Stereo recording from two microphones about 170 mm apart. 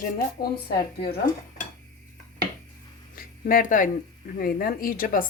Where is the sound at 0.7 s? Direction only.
70° left (ahead or behind).